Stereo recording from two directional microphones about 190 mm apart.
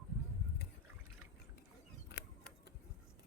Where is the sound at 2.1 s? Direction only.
65° left (ahead or behind).